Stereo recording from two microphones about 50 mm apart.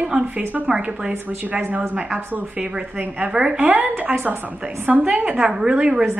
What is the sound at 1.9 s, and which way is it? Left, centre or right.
Speech, right.